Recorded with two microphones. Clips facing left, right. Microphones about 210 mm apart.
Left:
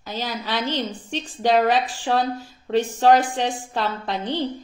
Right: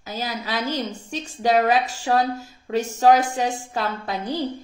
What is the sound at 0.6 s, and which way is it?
A woman's voice, 10° right (ahead or behind).